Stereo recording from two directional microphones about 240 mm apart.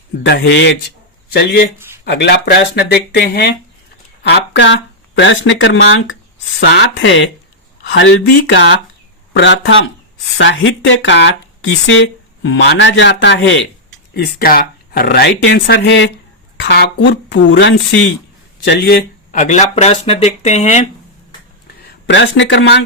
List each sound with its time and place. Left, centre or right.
0.2 s speech: left
22.0 s speech: left